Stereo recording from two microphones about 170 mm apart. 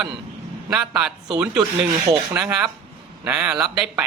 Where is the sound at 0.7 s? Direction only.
5° right (ahead or behind).